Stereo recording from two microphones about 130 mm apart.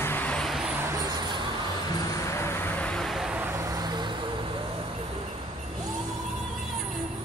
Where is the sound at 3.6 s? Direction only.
30° right (ahead or behind).